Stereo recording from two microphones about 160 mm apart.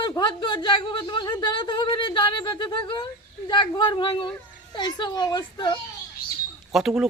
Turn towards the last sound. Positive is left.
turn(degrees=0)  # may be behind; listen again after turning